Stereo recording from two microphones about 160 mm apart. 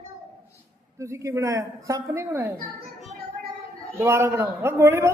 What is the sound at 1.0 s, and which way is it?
Speech, 20° right (ahead or behind).